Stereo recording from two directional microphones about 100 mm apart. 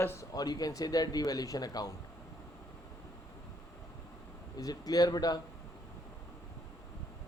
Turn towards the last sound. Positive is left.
turn(degrees=40)  # may be behind; listen again after turning